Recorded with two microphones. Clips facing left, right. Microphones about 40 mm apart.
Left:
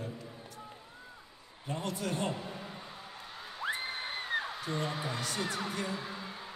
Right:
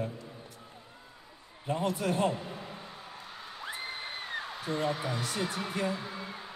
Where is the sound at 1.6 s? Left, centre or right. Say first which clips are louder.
Right 6 dB; centre.